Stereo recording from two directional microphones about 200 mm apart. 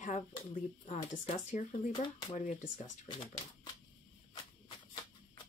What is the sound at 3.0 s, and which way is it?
Speech, 20° left (ahead or behind).